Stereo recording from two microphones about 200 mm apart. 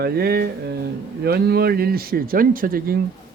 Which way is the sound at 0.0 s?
50° right (ahead or behind).